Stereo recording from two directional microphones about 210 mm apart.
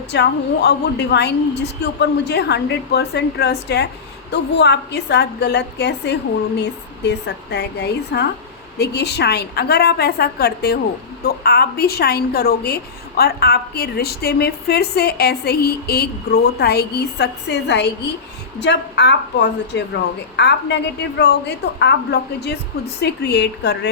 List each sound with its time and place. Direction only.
0.1 s a woman's voice: 50° left (ahead or behind)